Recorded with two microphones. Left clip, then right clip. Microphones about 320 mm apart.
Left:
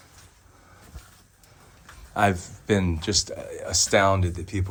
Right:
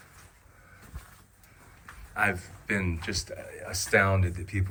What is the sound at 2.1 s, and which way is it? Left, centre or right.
Speech, centre.